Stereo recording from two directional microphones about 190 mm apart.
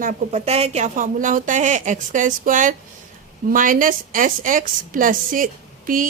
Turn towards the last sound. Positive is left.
turn(degrees=-45)  # may be behind; listen again after turning